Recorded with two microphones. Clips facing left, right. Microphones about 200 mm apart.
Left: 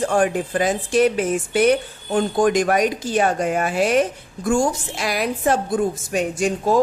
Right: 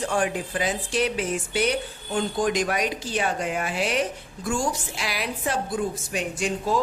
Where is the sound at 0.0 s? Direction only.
50° left (ahead or behind).